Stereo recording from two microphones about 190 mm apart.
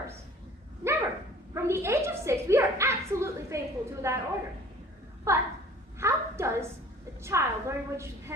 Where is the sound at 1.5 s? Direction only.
15° right (ahead or behind).